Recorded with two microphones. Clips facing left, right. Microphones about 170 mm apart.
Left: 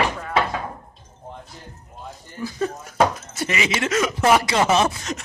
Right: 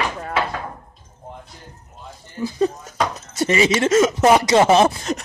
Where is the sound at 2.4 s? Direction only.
20° right (ahead or behind).